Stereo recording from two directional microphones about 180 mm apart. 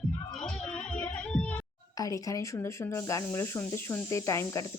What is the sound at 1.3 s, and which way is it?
Music, 5° left (ahead or behind).